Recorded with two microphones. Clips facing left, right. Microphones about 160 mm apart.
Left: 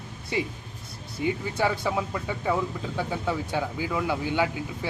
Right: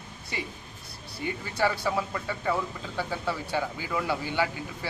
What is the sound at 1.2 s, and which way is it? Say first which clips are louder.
Speech: left 2 dB; 15° left (ahead or behind).